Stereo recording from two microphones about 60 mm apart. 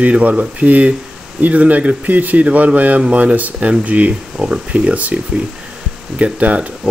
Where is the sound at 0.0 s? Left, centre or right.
Right.